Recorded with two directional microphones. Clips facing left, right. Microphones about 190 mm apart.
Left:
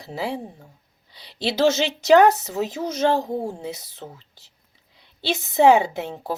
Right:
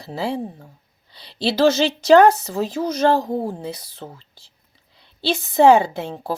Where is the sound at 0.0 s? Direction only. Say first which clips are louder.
Right 3 dB; 20° left (ahead or behind).